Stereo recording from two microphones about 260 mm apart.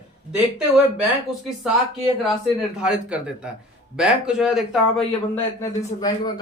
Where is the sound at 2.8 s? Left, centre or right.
Centre.